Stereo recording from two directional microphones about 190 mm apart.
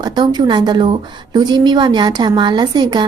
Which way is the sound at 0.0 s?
20° right (ahead or behind).